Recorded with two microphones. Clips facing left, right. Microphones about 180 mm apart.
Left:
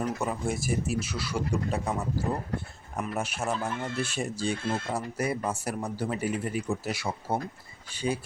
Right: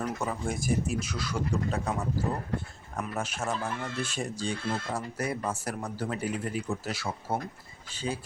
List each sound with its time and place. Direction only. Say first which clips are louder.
0.0 s speech: left 2 dB; 10° left (ahead or behind)
3.0 s speech: left 2 dB; 10° left (ahead or behind)
4.6 s speech: left 2 dB; 25° left (ahead or behind)
4.9 s speech: left 2 dB; 10° left (ahead or behind)